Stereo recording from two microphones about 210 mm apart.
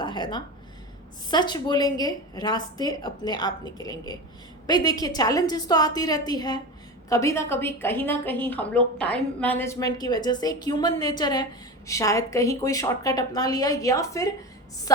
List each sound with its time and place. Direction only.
0.0 s a woman's voice: 20° left (ahead or behind)